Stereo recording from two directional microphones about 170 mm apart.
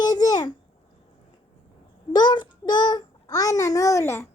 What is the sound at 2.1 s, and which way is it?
A child's voice, 25° left (ahead or behind).